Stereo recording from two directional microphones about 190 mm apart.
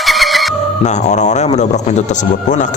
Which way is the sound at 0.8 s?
40° left (ahead or behind).